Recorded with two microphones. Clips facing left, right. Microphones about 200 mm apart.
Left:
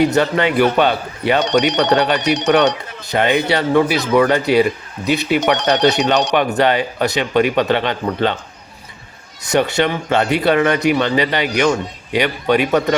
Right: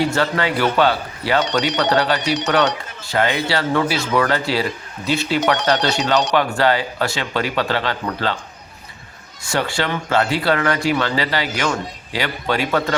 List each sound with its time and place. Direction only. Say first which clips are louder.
0.0 s speech: left 5 dB; 20° left (ahead or behind)
9.5 s speech: left 6 dB; 20° left (ahead or behind)